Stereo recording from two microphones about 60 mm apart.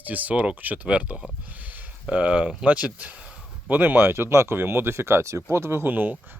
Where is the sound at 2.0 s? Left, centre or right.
Right.